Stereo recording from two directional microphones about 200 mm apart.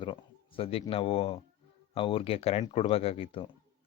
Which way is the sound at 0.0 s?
25° left (ahead or behind).